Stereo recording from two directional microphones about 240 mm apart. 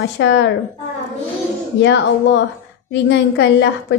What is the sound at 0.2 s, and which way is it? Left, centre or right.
Speech, left.